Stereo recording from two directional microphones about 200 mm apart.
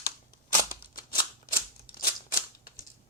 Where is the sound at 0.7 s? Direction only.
45° left (ahead or behind).